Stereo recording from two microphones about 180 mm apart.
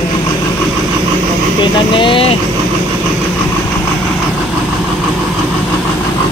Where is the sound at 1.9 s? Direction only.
30° left (ahead or behind).